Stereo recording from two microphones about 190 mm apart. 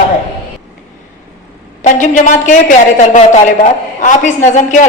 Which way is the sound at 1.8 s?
40° left (ahead or behind).